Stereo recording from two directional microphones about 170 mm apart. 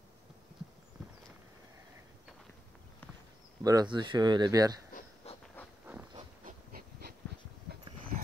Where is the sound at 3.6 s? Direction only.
25° right (ahead or behind).